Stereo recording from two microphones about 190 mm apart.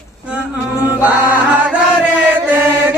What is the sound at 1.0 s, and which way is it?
Chant, 10° right (ahead or behind).